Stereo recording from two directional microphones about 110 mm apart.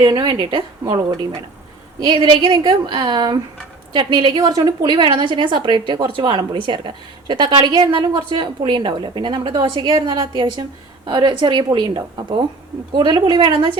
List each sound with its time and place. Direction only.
0.0 s a woman's voice: 45° right (ahead or behind)
2.1 s a woman's voice: 45° right (ahead or behind)